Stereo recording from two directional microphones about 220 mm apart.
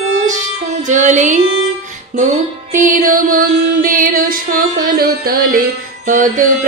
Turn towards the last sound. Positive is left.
turn(degrees=-35)  # may be behind; listen again after turning